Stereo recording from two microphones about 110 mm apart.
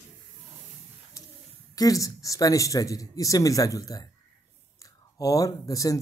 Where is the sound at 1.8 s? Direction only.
30° left (ahead or behind).